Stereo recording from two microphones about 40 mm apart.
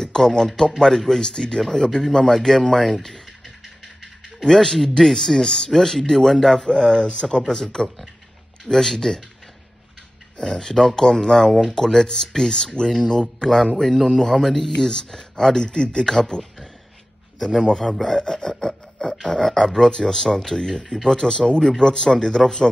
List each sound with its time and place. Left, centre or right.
0.0 s speech: centre
10.4 s speech: centre
17.4 s a man's voice: centre